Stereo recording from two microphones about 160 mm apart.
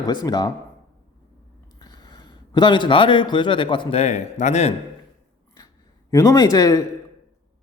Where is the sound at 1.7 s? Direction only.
25° left (ahead or behind); by 4.7 s 45° left (ahead or behind).